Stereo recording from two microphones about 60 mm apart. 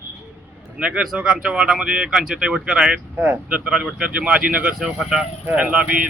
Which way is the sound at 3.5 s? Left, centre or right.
Right.